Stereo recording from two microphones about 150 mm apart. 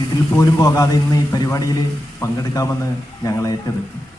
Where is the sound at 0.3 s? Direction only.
25° left (ahead or behind).